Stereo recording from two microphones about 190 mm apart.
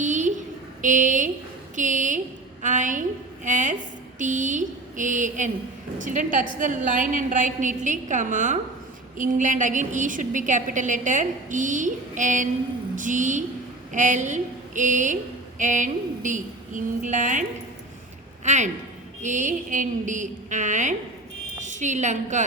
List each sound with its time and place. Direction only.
0.0 s a sound: 40° right (ahead or behind)
0.8 s a woman's voice: 40° right (ahead or behind)
18.4 s a woman's voice: 40° right (ahead or behind)